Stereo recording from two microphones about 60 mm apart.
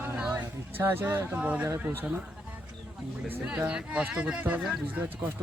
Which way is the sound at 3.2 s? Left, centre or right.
Right.